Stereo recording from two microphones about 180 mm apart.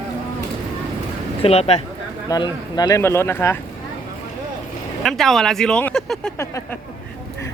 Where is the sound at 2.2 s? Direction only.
20° left (ahead or behind).